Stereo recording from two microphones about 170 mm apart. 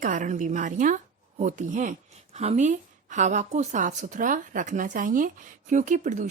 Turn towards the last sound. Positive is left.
turn(degrees=-45)  # may be behind; listen again after turning